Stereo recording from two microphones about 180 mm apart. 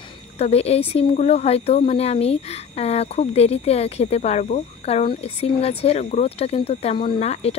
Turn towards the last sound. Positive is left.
turn(degrees=35)  # may be behind; listen again after turning